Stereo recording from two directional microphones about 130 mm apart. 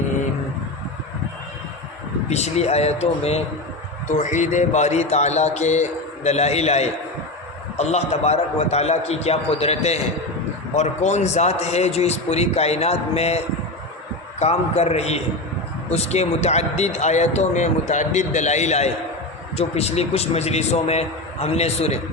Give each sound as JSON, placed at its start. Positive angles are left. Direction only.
{"t": 2.3, "sound": "speech", "side_deg": 55}
{"t": 4.2, "sound": "speech", "side_deg": 70}